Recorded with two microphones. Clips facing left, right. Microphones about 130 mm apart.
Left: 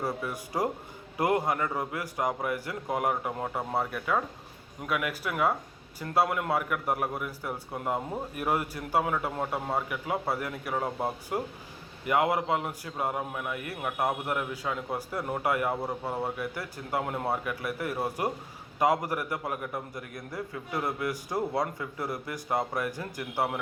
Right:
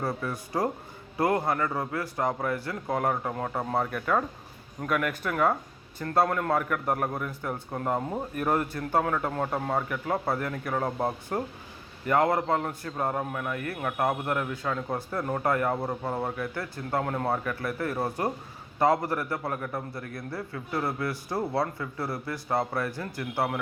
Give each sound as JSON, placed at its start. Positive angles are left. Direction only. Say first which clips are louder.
{"t": 0.0, "sound": "a man's voice", "louder": "right 1 dB", "side_deg": 15}